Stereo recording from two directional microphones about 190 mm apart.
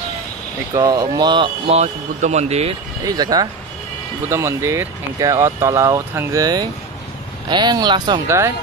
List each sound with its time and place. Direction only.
0.7 s speech: 20° right (ahead or behind); by 2.7 s 35° right (ahead or behind)
3.0 s speech: 20° right (ahead or behind)